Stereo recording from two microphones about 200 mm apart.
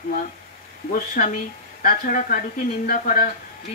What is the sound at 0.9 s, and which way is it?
Speech, 45° left (ahead or behind).